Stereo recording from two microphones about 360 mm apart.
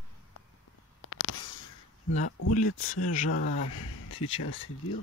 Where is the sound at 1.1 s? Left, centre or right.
Left.